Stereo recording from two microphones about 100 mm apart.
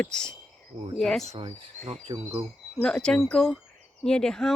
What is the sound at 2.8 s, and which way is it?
Speech, 5° left (ahead or behind).